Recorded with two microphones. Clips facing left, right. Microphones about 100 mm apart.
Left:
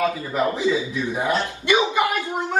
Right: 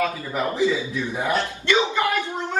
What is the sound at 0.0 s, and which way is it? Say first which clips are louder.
A woman's voice: left 3 dB; 20° left (ahead or behind).